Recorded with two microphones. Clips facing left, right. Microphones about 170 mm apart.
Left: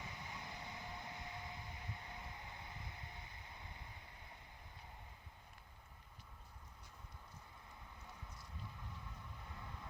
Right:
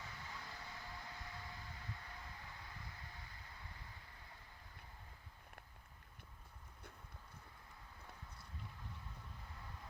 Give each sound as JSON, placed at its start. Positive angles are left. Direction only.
{"t": 0.0, "sound": "train", "side_deg": 20}